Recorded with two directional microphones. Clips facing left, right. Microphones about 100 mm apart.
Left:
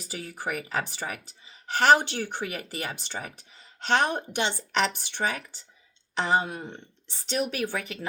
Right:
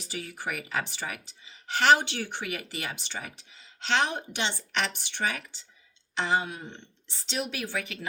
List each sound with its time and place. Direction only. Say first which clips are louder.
0.0 s a woman's voice: left 1 dB; 40° left (ahead or behind)